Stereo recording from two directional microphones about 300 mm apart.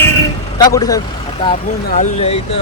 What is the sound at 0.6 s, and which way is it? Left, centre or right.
Speech, centre.